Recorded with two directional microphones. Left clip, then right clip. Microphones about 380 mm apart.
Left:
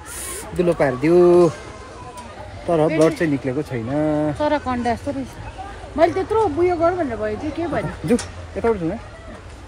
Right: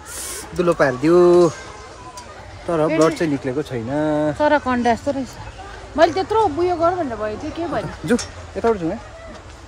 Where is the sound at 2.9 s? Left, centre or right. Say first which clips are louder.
Even; right.